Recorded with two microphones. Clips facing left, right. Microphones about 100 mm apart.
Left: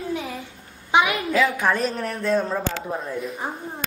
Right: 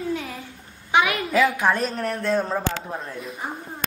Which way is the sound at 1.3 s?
Centre (ahead or behind).